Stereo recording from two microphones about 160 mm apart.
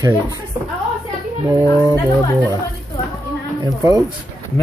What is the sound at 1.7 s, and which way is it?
Speech, 20° left (ahead or behind).